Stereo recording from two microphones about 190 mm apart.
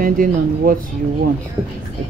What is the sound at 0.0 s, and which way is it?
Speech, 50° right (ahead or behind).